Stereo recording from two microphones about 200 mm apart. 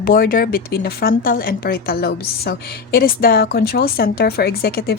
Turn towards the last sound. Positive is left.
turn(degrees=50)  # may be behind; listen again after turning